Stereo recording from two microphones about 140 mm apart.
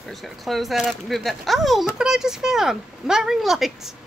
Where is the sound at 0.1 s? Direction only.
Centre (ahead or behind).